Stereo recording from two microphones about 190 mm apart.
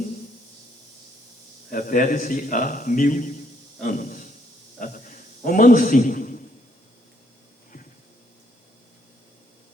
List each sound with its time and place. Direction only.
1.7 s a man's voice: 45° left (ahead or behind)